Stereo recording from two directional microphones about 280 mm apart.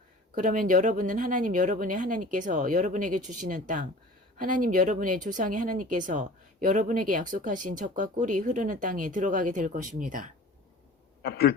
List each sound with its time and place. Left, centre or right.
0.3 s speech: right
11.2 s speech: left